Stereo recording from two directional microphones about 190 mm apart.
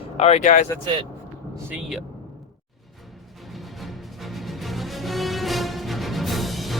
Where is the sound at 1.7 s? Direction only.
5° right (ahead or behind).